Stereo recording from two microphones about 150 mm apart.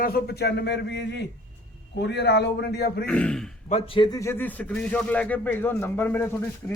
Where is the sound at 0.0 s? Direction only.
90° left.